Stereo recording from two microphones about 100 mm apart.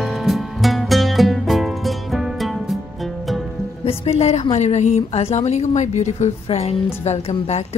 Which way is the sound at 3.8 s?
90° left.